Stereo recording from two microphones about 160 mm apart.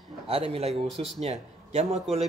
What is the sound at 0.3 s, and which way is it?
Speech, 35° right (ahead or behind).